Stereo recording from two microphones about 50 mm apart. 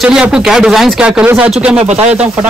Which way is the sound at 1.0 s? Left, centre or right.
Right.